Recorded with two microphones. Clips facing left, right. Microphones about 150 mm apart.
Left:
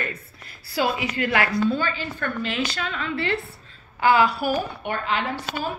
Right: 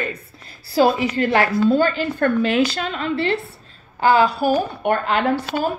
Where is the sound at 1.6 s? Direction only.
50° right (ahead or behind).